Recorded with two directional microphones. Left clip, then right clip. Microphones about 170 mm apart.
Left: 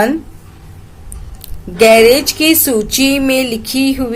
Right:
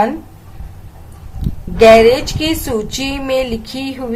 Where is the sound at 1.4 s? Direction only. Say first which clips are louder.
Right 1 dB; 30° left (ahead or behind).